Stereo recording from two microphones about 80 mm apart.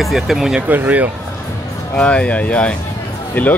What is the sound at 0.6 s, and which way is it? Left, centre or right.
Speech, right.